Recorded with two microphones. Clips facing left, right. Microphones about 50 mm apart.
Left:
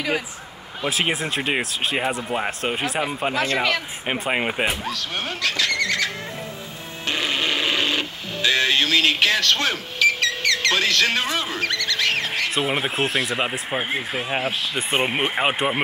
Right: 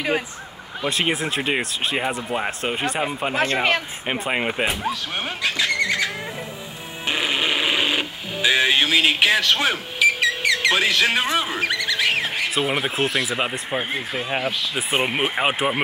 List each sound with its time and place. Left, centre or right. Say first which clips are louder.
0.8 s speech: right 1 dB; centre
5.4 s horse: right 1 dB; centre
7.1 s radio: right 1 dB; centre
12.5 s speech: right 1 dB; centre